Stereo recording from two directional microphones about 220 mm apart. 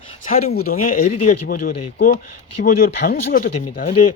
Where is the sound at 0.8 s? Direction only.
90° left.